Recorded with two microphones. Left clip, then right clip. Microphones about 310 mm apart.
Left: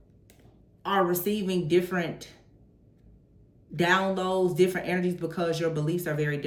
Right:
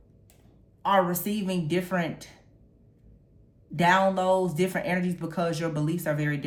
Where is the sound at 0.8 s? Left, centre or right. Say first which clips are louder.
Right 2 dB; centre.